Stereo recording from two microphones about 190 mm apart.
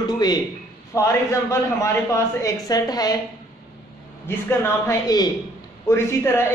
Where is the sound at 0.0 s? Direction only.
20° left (ahead or behind).